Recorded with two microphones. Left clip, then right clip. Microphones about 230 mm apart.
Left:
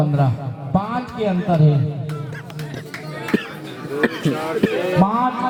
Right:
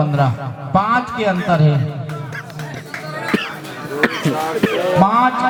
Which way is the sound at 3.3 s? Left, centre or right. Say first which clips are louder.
Right 2 dB; centre.